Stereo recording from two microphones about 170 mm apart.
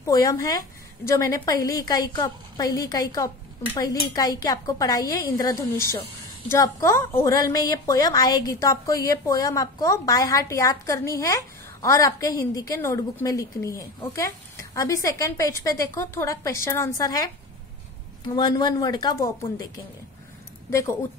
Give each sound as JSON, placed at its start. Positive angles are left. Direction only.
{"t": 0.0, "sound": "a woman's voice", "side_deg": 20}